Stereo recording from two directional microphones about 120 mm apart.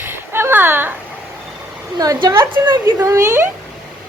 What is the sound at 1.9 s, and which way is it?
Speech, 30° right (ahead or behind).